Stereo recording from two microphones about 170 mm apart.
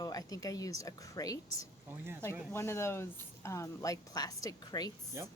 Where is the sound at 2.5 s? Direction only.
15° left (ahead or behind).